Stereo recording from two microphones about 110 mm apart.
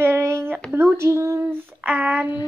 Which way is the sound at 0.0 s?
20° right (ahead or behind).